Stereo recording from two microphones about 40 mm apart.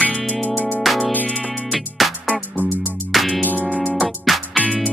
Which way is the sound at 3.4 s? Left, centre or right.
Left.